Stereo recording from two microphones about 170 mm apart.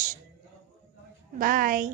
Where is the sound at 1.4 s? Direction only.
55° right (ahead or behind).